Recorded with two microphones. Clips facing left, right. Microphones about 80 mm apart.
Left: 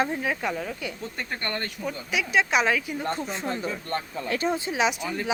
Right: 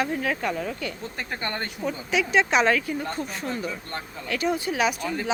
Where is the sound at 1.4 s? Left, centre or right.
Centre.